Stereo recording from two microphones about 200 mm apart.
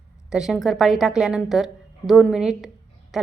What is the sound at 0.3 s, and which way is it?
A woman's voice, centre (ahead or behind).